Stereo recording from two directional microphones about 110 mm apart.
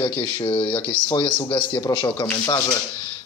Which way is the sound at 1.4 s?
45° left (ahead or behind).